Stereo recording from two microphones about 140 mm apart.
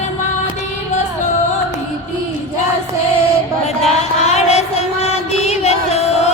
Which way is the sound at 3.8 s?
50° left (ahead or behind).